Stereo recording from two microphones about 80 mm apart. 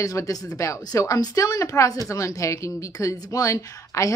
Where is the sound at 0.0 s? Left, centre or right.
Left.